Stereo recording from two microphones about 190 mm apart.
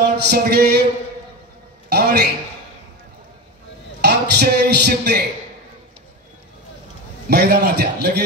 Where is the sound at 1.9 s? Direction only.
55° right (ahead or behind).